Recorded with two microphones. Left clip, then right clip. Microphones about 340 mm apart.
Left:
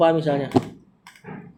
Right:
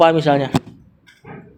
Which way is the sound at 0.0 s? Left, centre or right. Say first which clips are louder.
Right 5 dB; right.